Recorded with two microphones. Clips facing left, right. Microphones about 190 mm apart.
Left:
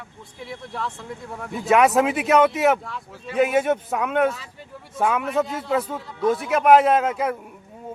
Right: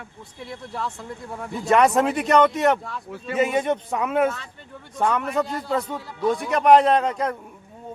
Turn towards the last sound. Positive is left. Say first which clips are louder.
# left 1 dB
turn(degrees=5)  # may be behind; listen again after turning